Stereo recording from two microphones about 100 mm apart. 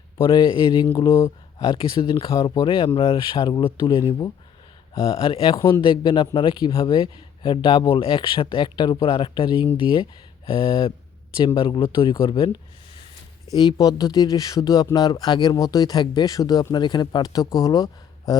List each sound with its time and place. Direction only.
0.2 s speech: 55° left (ahead or behind)
1.1 s speech: 25° left (ahead or behind)
1.6 s speech: 55° left (ahead or behind)
4.9 s speech: 65° left (ahead or behind); by 9.0 s 50° left (ahead or behind)
9.0 s speech: 65° left (ahead or behind)
13.6 s speech: 40° left (ahead or behind)